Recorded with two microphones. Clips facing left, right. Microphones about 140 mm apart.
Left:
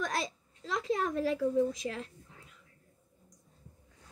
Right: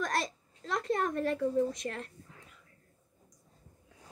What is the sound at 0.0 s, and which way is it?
A woman's voice, centre (ahead or behind).